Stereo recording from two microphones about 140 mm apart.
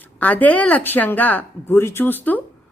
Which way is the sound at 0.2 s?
10° left (ahead or behind).